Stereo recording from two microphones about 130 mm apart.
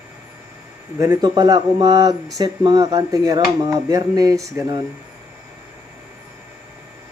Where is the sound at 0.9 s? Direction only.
25° right (ahead or behind).